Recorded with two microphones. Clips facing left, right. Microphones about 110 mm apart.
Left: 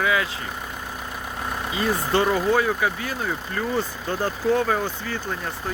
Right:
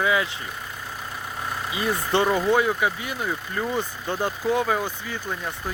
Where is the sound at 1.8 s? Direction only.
20° right (ahead or behind).